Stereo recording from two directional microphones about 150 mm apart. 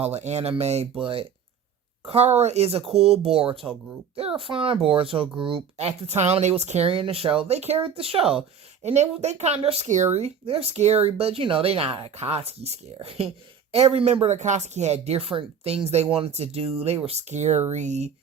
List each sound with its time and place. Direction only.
0.0 s speech: 45° right (ahead or behind)